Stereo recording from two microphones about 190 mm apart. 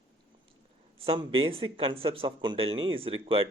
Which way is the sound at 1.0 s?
25° right (ahead or behind).